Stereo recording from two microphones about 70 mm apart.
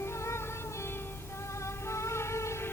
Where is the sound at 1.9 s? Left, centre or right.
Left.